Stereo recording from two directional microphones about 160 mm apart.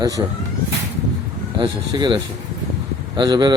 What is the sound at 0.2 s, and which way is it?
Speech, 25° right (ahead or behind).